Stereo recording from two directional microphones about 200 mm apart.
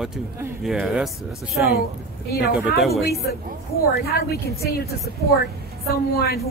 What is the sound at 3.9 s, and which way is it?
Speech, 50° left (ahead or behind).